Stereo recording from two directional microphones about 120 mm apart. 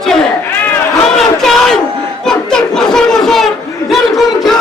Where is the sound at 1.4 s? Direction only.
Centre (ahead or behind).